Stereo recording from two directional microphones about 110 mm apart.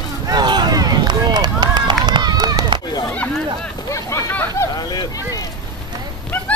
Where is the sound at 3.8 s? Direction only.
30° left (ahead or behind).